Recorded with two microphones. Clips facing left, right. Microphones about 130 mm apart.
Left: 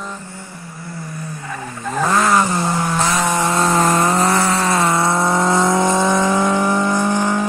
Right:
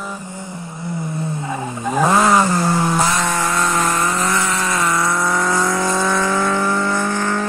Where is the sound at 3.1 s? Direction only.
20° left (ahead or behind).